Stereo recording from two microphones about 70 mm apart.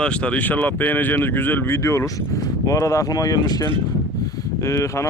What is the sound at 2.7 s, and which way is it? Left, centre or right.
Speech, left.